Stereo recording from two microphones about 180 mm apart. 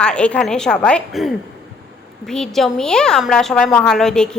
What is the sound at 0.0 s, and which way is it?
A woman's voice, 5° left (ahead or behind).